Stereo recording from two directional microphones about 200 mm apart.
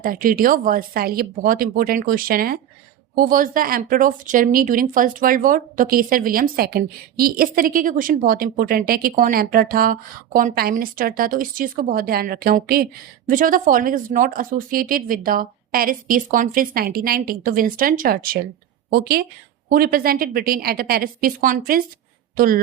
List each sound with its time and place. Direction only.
0.0 s speech: 45° right (ahead or behind)